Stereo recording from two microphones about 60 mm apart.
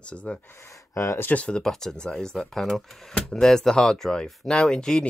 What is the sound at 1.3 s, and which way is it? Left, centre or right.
Speech, centre.